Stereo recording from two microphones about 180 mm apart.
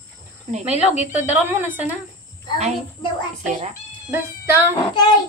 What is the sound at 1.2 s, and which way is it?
Speech, 10° right (ahead or behind).